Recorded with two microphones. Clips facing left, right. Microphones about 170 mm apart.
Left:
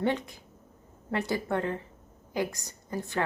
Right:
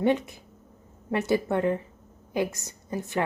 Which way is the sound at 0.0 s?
20° right (ahead or behind).